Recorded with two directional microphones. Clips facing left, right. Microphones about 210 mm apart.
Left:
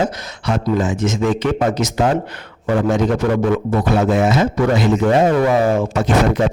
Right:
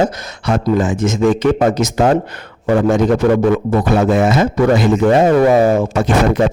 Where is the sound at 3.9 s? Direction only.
55° right (ahead or behind).